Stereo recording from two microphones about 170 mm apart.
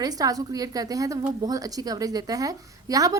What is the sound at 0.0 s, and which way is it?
A woman's voice, 20° right (ahead or behind).